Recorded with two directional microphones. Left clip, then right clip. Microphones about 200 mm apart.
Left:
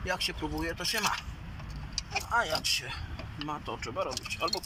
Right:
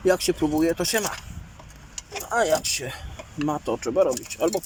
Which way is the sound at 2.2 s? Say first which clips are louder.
Right 8 dB; 60° right (ahead or behind).